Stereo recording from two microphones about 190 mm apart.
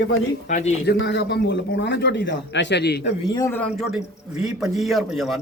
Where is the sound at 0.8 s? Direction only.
70° left (ahead or behind).